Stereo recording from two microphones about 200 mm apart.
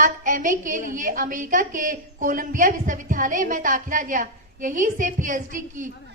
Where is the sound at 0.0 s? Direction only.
40° right (ahead or behind).